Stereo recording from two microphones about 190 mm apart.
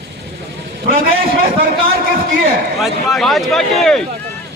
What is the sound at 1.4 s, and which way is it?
A man's voice, 50° right (ahead or behind).